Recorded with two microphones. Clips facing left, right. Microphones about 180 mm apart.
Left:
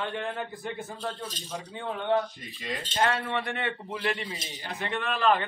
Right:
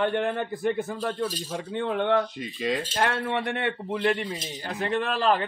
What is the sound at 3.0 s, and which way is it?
Speech, 60° right (ahead or behind).